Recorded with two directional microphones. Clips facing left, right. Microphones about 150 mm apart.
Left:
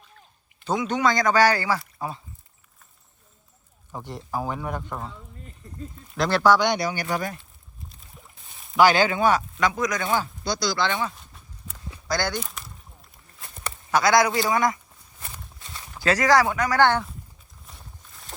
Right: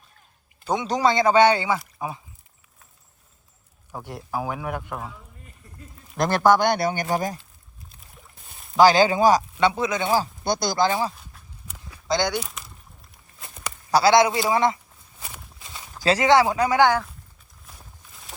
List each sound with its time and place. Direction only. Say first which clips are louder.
0.9 s speech: right 3 dB; 30° right (ahead or behind); by 2.2 s 15° right (ahead or behind)
3.9 s speech: right 1 dB; 10° right (ahead or behind)
6.1 s speech: right 1 dB; 50° right (ahead or behind)
8.7 s speech: right 3 dB; 35° right (ahead or behind)
10.4 s speech: right 3 dB; 55° right (ahead or behind); by 11.1 s 35° right (ahead or behind)
11.1 s walk: right 1 dB; centre (ahead or behind)
12.0 s speech: right 3 dB; 20° right (ahead or behind)
12.4 s speech: right 1 dB; centre (ahead or behind)
13.9 s speech: right 3 dB; 25° right (ahead or behind)
15.2 s walk: right 1 dB; 10° right (ahead or behind)
16.0 s speech: right 2 dB; 25° right (ahead or behind)
16.7 s speech: right 1 dB; 15° right (ahead or behind)
17.7 s a sound: even; centre (ahead or behind)